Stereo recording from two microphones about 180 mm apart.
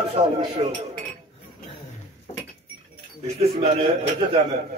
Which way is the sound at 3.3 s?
30° right (ahead or behind).